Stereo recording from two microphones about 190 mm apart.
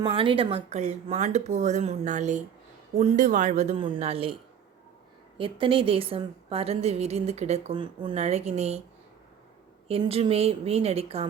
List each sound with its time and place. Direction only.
0.0 s a woman's voice: 25° right (ahead or behind)
5.4 s a woman's voice: 25° right (ahead or behind)
9.9 s a woman's voice: 30° right (ahead or behind)